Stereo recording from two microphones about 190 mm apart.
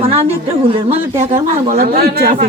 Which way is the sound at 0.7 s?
30° right (ahead or behind).